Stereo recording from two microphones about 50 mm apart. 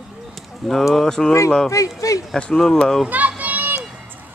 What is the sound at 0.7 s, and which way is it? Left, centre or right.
Speech, centre.